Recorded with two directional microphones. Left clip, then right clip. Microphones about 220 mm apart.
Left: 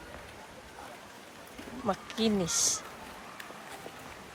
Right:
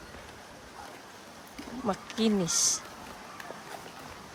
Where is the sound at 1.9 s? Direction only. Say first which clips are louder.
Right 1 dB; 15° right (ahead or behind).